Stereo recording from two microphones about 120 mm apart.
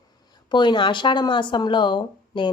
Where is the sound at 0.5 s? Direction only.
40° left (ahead or behind).